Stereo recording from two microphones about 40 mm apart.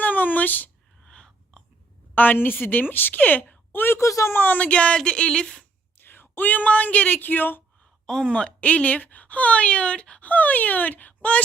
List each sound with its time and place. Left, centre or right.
0.0 s speech: left
1.0 s a sound: centre
2.1 s speech: left
3.7 s speech: left
4.4 s speech: left
4.7 s speech: left
6.0 s speech: left
8.0 s speech: centre
10.2 s speech: left